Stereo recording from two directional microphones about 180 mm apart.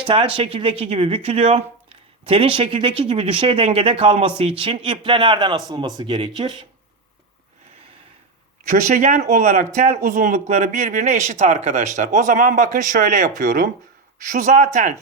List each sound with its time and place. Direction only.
0.1 s speech: 30° right (ahead or behind)
8.9 s speech: 40° right (ahead or behind)